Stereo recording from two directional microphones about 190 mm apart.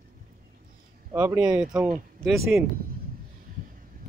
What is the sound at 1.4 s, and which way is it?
Speech, 5° right (ahead or behind).